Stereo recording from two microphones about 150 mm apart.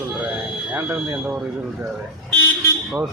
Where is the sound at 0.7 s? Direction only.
15° right (ahead or behind).